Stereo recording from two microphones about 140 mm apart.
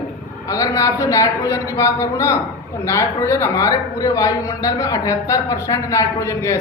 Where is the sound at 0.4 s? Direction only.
25° left (ahead or behind).